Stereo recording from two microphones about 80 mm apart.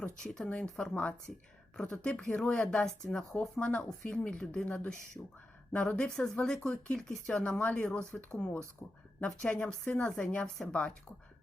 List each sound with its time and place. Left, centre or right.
0.2 s speech: centre
3.5 s speech: centre